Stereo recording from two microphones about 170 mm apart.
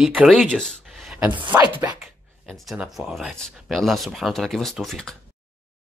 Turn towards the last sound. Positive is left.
turn(degrees=5)  # may be behind; listen again after turning